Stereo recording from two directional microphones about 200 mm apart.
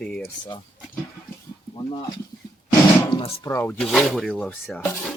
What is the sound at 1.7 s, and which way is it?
Speech, 20° left (ahead or behind).